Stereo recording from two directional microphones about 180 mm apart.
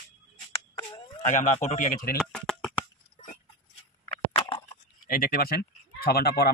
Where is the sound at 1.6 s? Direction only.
45° left (ahead or behind).